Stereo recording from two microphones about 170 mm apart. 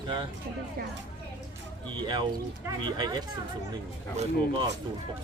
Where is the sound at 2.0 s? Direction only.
25° right (ahead or behind).